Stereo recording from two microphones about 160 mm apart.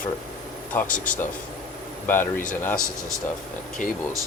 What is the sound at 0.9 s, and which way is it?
Speech, 55° left (ahead or behind).